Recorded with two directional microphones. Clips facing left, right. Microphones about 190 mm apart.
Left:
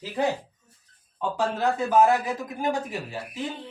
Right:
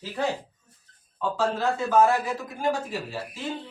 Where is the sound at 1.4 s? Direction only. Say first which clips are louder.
Left 1 dB; 15° left (ahead or behind).